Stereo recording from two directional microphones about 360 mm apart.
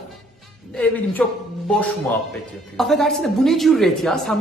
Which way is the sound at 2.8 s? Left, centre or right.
Centre.